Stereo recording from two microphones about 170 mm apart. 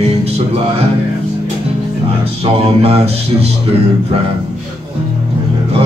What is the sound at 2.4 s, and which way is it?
Speech, 35° right (ahead or behind).